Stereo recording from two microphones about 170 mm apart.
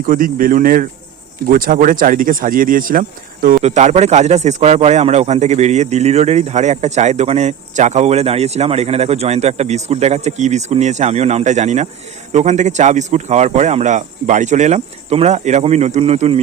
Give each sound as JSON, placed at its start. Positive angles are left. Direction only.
{"t": 0.0, "sound": "speech", "side_deg": -55}
{"t": 3.6, "sound": "speech", "side_deg": -40}